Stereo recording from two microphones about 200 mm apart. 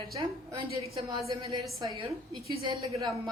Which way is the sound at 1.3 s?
25° right (ahead or behind).